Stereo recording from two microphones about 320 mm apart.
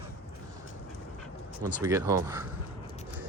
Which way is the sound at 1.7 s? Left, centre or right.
Centre.